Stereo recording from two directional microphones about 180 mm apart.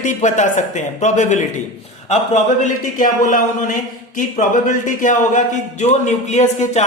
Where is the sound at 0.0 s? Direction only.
45° left (ahead or behind).